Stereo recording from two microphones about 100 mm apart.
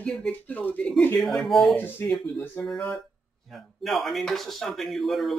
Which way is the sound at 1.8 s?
15° left (ahead or behind).